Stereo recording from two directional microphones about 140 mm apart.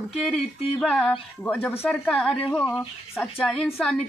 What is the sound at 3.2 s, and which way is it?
Speech, centre (ahead or behind).